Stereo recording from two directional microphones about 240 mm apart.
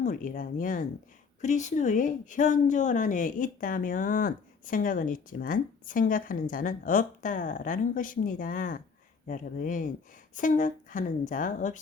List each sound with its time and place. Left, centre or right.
0.0 s speech: left